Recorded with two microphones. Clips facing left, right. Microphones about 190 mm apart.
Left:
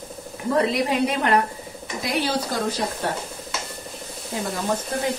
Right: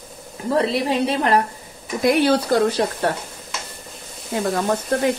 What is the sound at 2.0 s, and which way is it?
A woman's voice, 55° right (ahead or behind).